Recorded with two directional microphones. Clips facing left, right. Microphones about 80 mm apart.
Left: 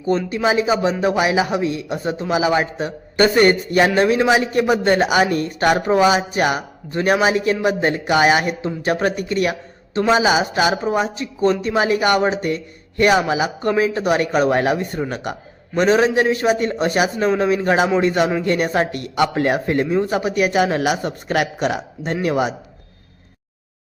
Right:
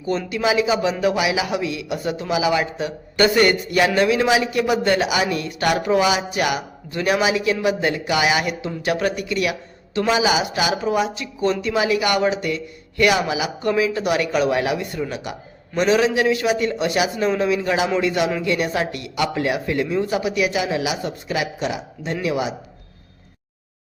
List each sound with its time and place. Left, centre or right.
0.3 s a man's voice: left